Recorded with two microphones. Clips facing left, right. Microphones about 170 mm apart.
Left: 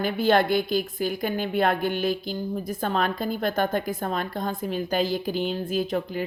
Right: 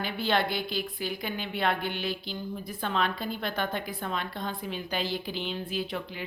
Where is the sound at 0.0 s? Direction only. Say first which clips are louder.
Left 7 dB; 45° left (ahead or behind).